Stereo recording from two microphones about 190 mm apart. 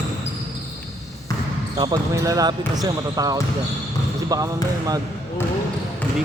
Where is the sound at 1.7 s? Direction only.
25° right (ahead or behind).